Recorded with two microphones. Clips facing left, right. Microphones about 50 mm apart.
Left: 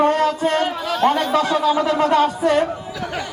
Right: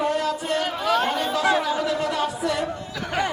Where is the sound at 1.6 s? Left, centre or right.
Left.